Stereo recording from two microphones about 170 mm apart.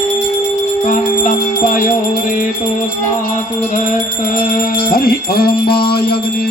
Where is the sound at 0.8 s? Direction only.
50° left (ahead or behind).